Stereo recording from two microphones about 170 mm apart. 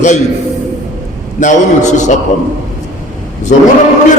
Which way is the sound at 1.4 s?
45° left (ahead or behind).